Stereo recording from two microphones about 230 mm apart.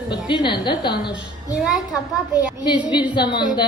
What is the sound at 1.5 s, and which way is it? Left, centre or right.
Speech, centre.